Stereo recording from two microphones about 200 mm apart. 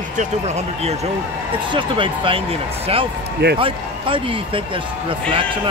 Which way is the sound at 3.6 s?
25° right (ahead or behind).